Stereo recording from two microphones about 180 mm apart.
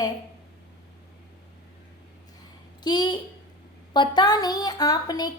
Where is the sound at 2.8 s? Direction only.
25° left (ahead or behind).